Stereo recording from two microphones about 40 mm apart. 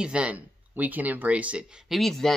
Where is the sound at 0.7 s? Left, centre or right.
Right.